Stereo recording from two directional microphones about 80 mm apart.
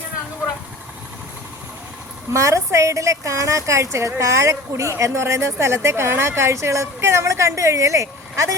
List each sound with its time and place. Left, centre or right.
2.3 s a woman's voice: right